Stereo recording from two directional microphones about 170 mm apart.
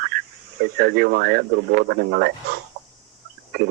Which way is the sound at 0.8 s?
65° right (ahead or behind).